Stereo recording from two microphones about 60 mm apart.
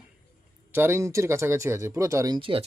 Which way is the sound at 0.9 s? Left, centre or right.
Right.